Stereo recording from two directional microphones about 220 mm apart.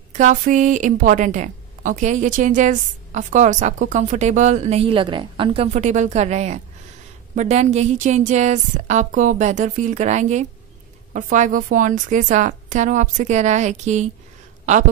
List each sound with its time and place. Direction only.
0.1 s a woman's voice: 35° right (ahead or behind)